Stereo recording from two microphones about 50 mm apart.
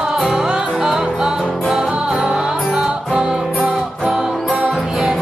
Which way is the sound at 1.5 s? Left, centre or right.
Centre.